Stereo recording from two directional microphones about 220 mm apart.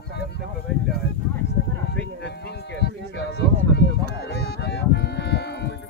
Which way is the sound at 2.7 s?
50° left (ahead or behind).